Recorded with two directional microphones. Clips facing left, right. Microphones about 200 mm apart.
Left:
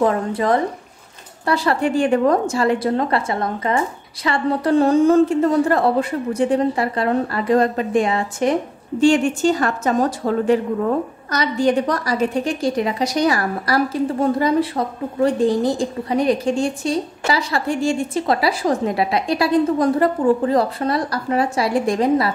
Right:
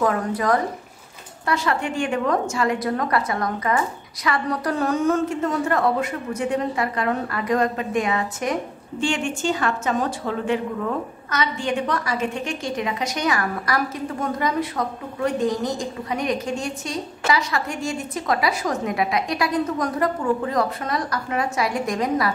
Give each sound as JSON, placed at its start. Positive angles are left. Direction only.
{"t": 0.0, "sound": "a woman's voice", "side_deg": 25}